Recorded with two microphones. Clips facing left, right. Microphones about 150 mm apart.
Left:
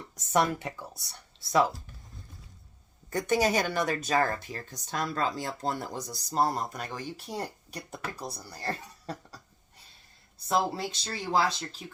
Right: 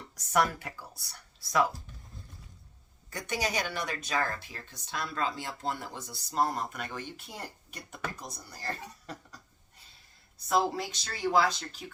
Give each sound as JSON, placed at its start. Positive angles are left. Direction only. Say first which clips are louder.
{"t": 0.2, "sound": "speech", "louder": "left 2 dB", "side_deg": 25}
{"t": 3.1, "sound": "speech", "louder": "left 8 dB", "side_deg": 45}
{"t": 10.8, "sound": "speech", "louder": "left 1 dB", "side_deg": 30}